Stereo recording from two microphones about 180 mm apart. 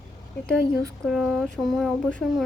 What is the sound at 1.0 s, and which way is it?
Speech, centre (ahead or behind).